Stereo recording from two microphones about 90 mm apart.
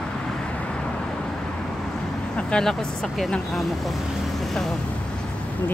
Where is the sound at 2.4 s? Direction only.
10° left (ahead or behind).